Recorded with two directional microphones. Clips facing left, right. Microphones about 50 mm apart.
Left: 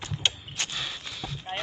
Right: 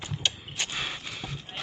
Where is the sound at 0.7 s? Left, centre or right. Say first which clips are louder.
Right 1 dB; right.